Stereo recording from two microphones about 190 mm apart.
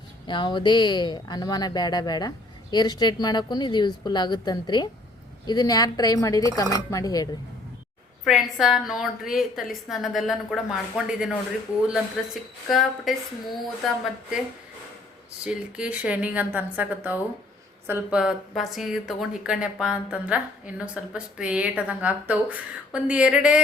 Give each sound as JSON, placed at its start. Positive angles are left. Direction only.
{"t": 0.3, "sound": "speech", "side_deg": 25}
{"t": 8.2, "sound": "speech", "side_deg": 0}
{"t": 15.4, "sound": "a woman's voice", "side_deg": -5}